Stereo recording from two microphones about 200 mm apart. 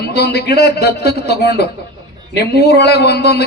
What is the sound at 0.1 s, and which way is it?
Speech, 55° left (ahead or behind).